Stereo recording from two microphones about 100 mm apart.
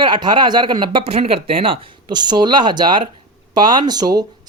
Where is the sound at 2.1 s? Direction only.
45° right (ahead or behind).